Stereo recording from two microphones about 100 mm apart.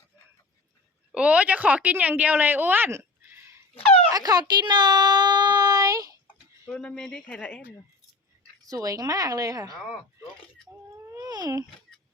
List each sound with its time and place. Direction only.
1.1 s speech: 15° right (ahead or behind)
4.1 s a child's voice: 40° right (ahead or behind)
6.7 s speech: 5° left (ahead or behind)
8.6 s a woman's voice: 35° right (ahead or behind)
10.9 s baby cry: 30° right (ahead or behind)
11.3 s a sound: 40° right (ahead or behind)